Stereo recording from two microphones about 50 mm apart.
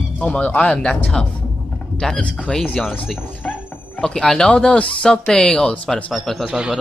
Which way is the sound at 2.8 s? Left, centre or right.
Left.